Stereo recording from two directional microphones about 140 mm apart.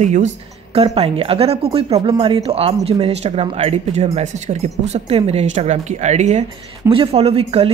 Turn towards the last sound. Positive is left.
turn(degrees=-45)  # may be behind; listen again after turning